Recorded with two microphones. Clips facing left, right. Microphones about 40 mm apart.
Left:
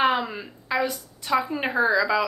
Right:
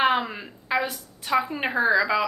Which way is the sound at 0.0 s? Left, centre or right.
Centre.